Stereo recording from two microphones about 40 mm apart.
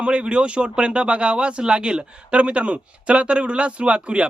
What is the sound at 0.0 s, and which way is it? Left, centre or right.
Speech, right.